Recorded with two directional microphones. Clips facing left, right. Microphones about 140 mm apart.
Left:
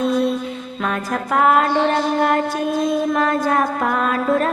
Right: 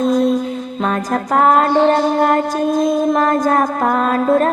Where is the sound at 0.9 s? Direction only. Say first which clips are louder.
Right 4 dB; 40° right (ahead or behind).